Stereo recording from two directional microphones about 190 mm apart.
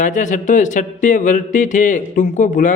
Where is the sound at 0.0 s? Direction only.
40° left (ahead or behind).